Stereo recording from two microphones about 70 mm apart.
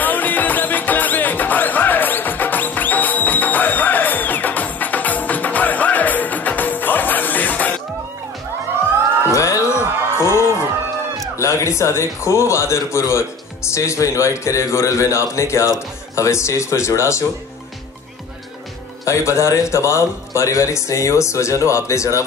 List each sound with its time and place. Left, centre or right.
0.0 s music: left
9.3 s music: left
11.3 s a man's voice: left
19.0 s a man's voice: left